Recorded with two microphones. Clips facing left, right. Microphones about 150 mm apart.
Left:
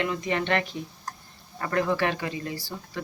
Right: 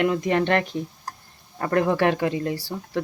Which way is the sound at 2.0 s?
60° right (ahead or behind).